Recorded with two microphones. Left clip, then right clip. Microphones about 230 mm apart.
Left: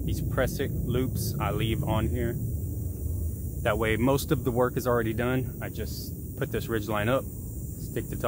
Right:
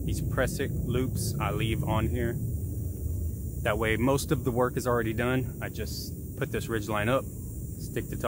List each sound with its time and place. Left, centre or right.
0.0 s speech: centre
3.6 s speech: centre